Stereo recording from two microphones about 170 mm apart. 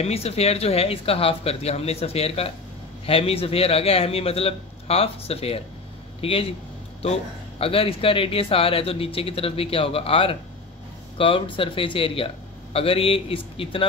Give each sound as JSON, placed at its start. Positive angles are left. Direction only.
{"t": 0.0, "sound": "speech", "side_deg": 35}